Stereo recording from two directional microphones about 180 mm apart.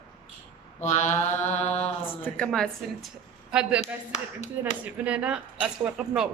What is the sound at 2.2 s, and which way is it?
A woman's voice, 5° left (ahead or behind).